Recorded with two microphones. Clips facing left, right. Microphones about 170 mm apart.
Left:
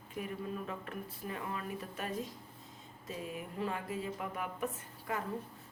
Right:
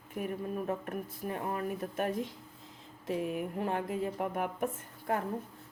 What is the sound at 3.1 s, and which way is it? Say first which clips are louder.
Speech: right 9 dB; 65° right (ahead or behind).